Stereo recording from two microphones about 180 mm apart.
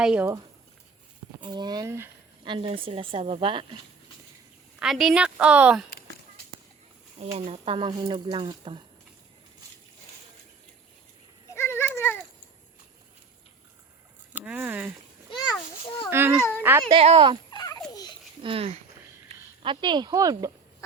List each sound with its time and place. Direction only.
0.0 s a woman's voice: 5° right (ahead or behind)
1.4 s speech: 25° right (ahead or behind)
2.4 s speech: 30° right (ahead or behind)
4.8 s a woman's voice: centre (ahead or behind)
7.3 s speech: 35° right (ahead or behind)
11.5 s a sound: 15° left (ahead or behind)
14.3 s speech: 10° right (ahead or behind)
16.0 s a child's voice: 10° right (ahead or behind)
16.4 s speech: 10° left (ahead or behind)
16.9 s speech: 35° right (ahead or behind)
17.5 s turkey: 25° left (ahead or behind)
17.9 s babbling: 20° left (ahead or behind)
18.4 s speech: 30° right (ahead or behind)